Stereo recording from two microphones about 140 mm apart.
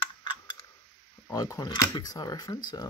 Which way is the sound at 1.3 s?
25° left (ahead or behind).